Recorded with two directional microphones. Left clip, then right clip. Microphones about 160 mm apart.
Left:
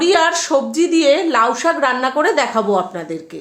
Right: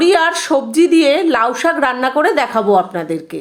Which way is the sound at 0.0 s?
30° right (ahead or behind).